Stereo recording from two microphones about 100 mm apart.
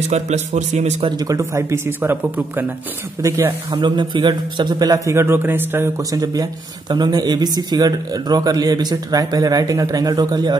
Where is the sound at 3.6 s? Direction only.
50° right (ahead or behind); by 5.9 s 20° right (ahead or behind).